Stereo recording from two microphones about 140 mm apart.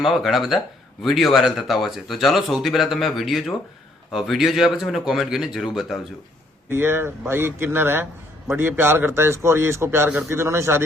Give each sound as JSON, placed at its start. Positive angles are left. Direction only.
{"t": 0.0, "sound": "speech", "side_deg": 0}
{"t": 6.7, "sound": "a man's voice", "side_deg": -15}